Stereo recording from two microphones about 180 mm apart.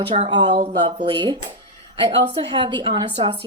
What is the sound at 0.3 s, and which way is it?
Speech, 25° right (ahead or behind).